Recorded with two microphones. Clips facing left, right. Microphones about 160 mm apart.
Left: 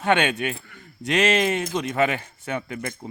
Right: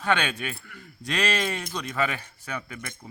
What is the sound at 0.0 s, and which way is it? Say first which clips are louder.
Speech: left 5 dB; 20° left (ahead or behind).